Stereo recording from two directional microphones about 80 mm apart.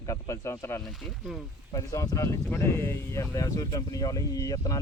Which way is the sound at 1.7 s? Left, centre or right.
Left.